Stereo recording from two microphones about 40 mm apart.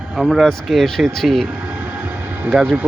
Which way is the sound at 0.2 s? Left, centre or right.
Right.